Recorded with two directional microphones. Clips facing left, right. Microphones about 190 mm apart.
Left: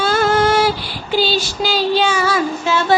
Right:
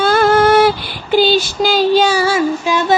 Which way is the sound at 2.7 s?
15° right (ahead or behind).